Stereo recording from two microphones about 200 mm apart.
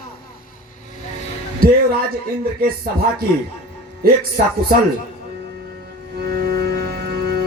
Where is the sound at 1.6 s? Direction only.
50° right (ahead or behind).